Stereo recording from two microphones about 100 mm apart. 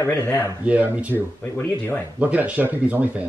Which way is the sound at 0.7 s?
15° right (ahead or behind).